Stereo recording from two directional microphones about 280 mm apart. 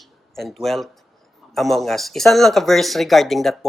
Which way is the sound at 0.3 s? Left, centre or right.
Centre.